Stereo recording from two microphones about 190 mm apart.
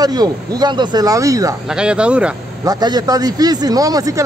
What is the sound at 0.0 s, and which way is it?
A man's voice, 20° right (ahead or behind).